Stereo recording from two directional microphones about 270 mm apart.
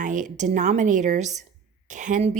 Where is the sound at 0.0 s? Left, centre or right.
Right.